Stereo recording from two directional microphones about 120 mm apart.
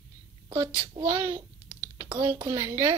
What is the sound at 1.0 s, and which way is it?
Speech, 25° right (ahead or behind).